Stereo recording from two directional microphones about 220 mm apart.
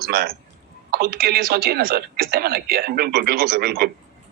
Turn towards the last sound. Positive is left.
turn(degrees=-45)  # may be behind; listen again after turning